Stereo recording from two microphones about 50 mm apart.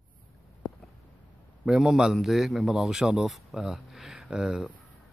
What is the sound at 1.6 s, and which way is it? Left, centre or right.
A man's voice, centre.